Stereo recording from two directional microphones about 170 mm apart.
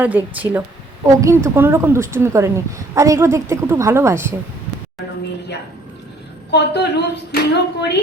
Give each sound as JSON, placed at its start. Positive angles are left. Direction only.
{"t": 0.0, "sound": "a woman's voice", "side_deg": -10}
{"t": 6.5, "sound": "a woman's voice", "side_deg": 85}